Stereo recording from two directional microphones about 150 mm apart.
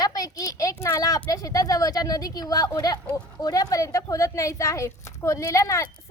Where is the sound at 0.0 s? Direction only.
25° left (ahead or behind).